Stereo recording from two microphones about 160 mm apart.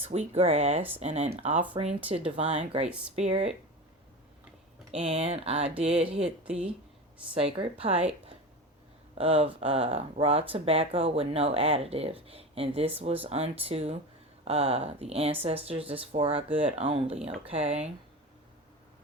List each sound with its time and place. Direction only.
0.0 s speech: 40° right (ahead or behind)
1.7 s speech: 30° right (ahead or behind)
4.9 s speech: 35° right (ahead or behind)
5.9 s speech: 5° right (ahead or behind)
7.4 s speech: 35° right (ahead or behind)
9.1 s speech: 35° right (ahead or behind)
16.5 s speech: 10° right (ahead or behind)
16.7 s speech: 35° right (ahead or behind)